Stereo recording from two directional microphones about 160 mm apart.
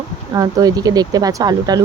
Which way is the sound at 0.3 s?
25° right (ahead or behind).